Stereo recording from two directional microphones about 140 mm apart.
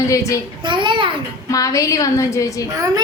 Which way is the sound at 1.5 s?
25° left (ahead or behind).